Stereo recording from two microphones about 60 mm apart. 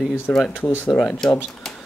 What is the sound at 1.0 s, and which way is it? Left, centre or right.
Speech, centre.